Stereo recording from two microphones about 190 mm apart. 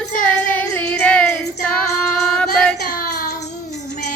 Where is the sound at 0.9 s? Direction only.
5° left (ahead or behind).